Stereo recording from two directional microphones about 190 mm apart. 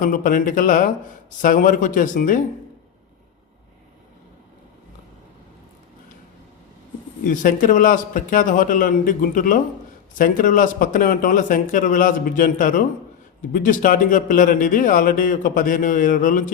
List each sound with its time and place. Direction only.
0.0 s a man's voice: 45° left (ahead or behind)
7.3 s a man's voice: 45° left (ahead or behind)